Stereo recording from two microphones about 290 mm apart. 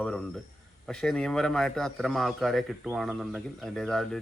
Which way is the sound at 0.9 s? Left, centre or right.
Centre.